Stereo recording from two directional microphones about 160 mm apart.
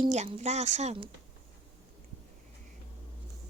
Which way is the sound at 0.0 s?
40° right (ahead or behind).